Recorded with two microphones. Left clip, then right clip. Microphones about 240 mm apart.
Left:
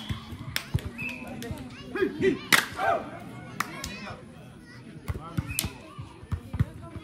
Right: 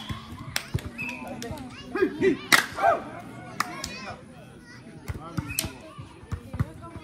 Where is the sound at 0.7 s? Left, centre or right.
Right.